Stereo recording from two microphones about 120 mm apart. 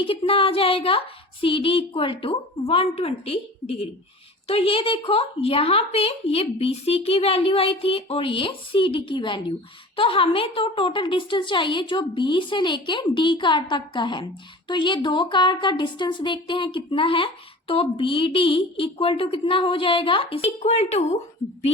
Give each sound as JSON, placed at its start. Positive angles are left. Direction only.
{"t": 0.0, "sound": "a woman's voice", "side_deg": 50}
{"t": 20.6, "sound": "speech", "side_deg": 65}